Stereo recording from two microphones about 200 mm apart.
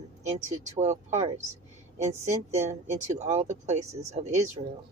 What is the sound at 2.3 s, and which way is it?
Speech, 35° right (ahead or behind).